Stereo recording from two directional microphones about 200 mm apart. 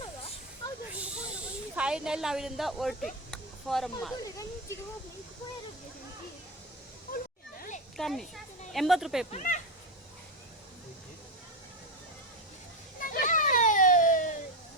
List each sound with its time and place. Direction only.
1.7 s speech: 5° right (ahead or behind)
4.2 s speech: 15° left (ahead or behind)
7.9 s speech: centre (ahead or behind)
9.3 s speech: 40° left (ahead or behind)
13.1 s children playing: 40° left (ahead or behind)